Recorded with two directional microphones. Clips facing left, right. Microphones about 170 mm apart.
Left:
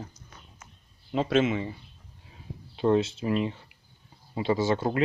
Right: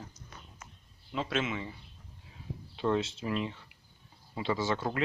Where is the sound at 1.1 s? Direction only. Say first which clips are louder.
Left 8 dB; 40° left (ahead or behind).